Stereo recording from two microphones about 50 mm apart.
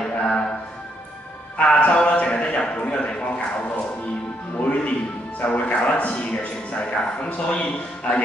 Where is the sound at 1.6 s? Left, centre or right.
Left.